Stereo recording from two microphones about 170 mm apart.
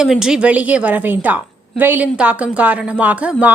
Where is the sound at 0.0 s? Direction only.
5° right (ahead or behind).